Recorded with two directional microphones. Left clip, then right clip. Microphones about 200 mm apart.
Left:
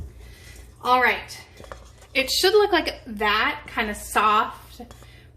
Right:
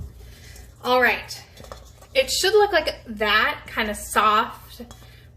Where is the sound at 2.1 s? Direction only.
30° left (ahead or behind).